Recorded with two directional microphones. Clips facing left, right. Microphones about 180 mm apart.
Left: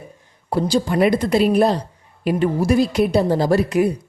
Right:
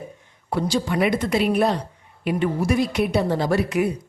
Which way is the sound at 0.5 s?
35° left (ahead or behind).